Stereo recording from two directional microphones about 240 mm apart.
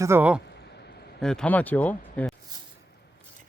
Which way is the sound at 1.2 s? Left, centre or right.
Centre.